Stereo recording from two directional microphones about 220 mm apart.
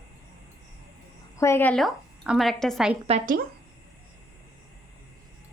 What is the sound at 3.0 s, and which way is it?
Speech, 35° right (ahead or behind).